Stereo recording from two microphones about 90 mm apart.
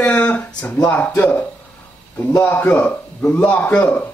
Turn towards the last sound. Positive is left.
turn(degrees=20)  # may be behind; listen again after turning